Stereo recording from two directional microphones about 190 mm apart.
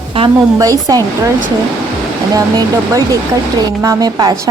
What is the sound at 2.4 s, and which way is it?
A woman's voice, 20° right (ahead or behind).